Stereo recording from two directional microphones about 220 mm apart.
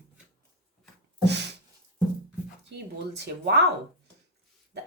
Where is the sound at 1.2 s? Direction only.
50° right (ahead or behind).